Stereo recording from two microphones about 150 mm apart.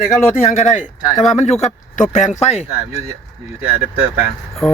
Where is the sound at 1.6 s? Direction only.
55° left (ahead or behind).